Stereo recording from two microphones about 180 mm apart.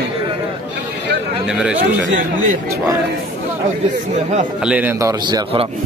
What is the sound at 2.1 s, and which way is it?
Speech, 45° right (ahead or behind).